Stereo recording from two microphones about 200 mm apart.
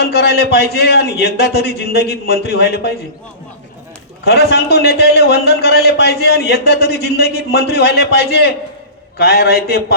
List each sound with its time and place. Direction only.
0.0 s a man's voice: 55° left (ahead or behind)
4.3 s a man's voice: 55° left (ahead or behind)